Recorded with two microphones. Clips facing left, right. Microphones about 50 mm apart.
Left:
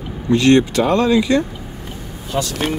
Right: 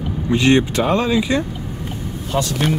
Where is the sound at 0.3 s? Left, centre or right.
Centre.